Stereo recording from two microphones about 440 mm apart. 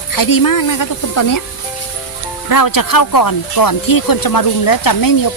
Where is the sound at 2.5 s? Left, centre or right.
Left.